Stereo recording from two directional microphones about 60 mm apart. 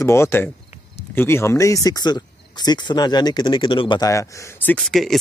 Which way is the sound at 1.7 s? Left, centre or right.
Left.